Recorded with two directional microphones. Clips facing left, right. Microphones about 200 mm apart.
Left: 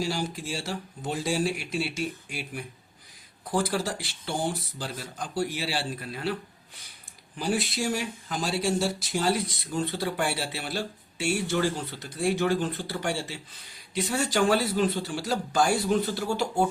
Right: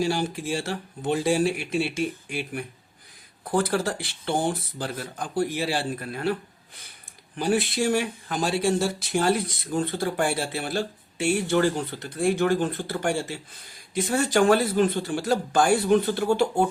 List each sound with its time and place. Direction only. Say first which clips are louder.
0.0 s speech: right 5 dB; 55° right (ahead or behind)
7.3 s speech: right 4 dB; 60° right (ahead or behind)